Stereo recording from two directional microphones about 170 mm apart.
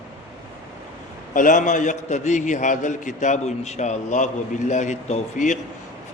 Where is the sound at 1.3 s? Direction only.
50° left (ahead or behind).